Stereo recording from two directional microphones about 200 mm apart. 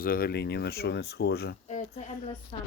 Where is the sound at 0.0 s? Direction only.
45° left (ahead or behind).